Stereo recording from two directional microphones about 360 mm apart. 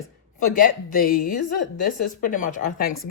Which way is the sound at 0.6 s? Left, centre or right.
Left.